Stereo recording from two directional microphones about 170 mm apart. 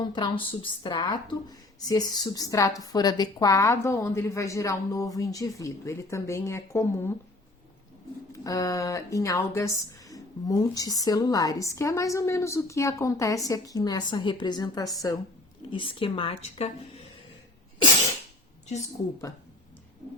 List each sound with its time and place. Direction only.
0.0 s a woman's voice: 25° left (ahead or behind)
8.3 s a woman's voice: 20° left (ahead or behind); by 16.6 s 35° left (ahead or behind)